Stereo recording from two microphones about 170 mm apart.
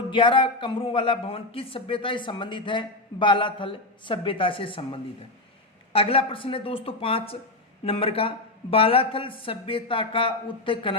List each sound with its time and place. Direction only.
0.1 s speech: 30° left (ahead or behind)